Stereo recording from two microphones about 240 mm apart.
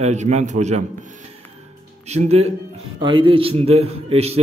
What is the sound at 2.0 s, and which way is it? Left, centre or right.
A man's voice, right.